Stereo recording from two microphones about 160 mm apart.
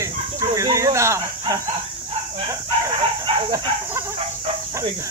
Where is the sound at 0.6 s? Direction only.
20° right (ahead or behind).